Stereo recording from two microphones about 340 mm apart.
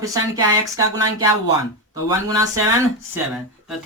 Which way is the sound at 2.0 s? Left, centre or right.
Centre.